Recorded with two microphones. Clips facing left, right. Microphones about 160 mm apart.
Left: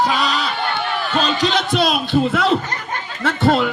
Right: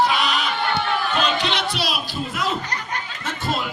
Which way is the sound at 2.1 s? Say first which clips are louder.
Left 11 dB; 70° left (ahead or behind).